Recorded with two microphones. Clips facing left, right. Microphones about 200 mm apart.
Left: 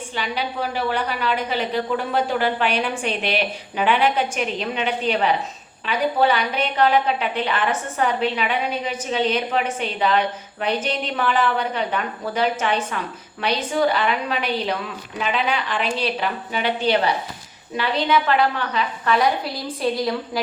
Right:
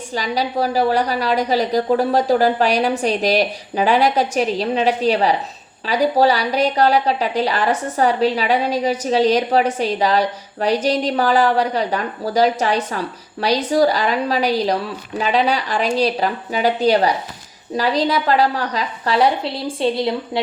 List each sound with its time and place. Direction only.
0.1 s a woman's voice: 40° right (ahead or behind)